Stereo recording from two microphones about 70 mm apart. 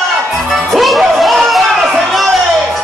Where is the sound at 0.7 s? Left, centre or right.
Centre.